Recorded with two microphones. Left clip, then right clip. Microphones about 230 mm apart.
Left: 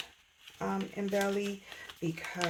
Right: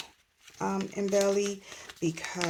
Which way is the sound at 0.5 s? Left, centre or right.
Right.